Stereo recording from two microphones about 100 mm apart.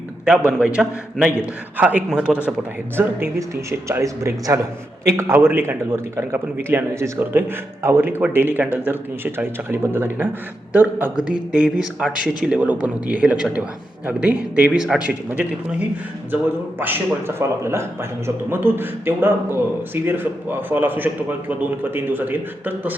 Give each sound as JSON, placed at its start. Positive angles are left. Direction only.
{"t": 0.6, "sound": "a man's voice", "side_deg": -10}
{"t": 3.3, "sound": "a man's voice", "side_deg": -30}
{"t": 16.8, "sound": "a man's voice", "side_deg": -20}